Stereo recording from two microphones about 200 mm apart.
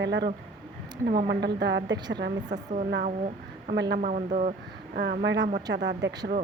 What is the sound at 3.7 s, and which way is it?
Speech, 55° right (ahead or behind).